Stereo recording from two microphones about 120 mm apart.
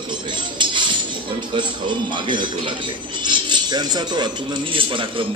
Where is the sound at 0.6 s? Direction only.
40° right (ahead or behind).